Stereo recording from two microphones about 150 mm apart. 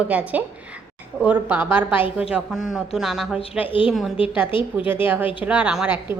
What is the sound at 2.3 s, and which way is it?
Speech, centre (ahead or behind).